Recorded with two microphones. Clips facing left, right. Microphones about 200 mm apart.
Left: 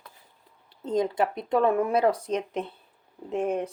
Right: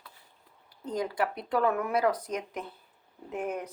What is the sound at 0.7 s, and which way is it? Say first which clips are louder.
Speech: left 6 dB; 25° left (ahead or behind).